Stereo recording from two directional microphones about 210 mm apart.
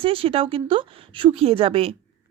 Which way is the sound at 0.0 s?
25° right (ahead or behind).